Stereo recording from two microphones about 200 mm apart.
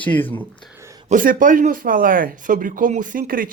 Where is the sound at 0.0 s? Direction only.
10° left (ahead or behind).